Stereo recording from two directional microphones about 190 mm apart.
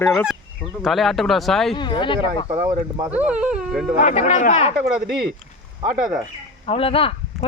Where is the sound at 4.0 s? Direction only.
40° left (ahead or behind).